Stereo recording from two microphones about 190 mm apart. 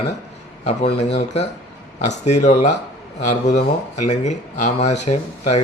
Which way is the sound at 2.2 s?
40° left (ahead or behind).